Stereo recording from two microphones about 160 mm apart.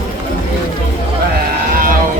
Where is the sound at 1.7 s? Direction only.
60° right (ahead or behind).